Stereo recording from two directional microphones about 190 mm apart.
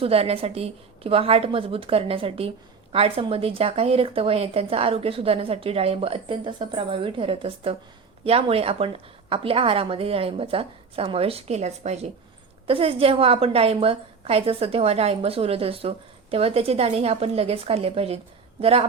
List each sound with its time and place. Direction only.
0.0 s a woman's voice: 30° right (ahead or behind)